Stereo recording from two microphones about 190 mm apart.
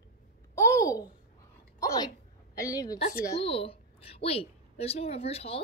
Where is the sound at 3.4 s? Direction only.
30° left (ahead or behind).